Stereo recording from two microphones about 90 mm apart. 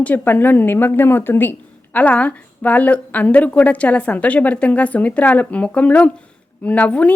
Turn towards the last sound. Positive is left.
turn(degrees=15)  # may be behind; listen again after turning